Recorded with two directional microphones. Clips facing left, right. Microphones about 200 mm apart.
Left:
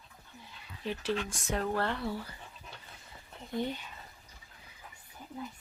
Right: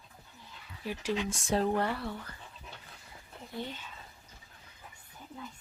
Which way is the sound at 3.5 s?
15° left (ahead or behind).